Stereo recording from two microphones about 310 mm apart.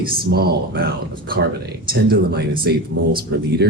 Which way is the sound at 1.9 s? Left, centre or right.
Right.